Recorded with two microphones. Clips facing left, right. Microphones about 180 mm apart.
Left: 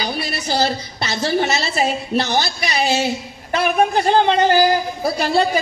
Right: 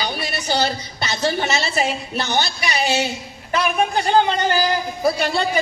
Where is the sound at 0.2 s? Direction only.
40° left (ahead or behind).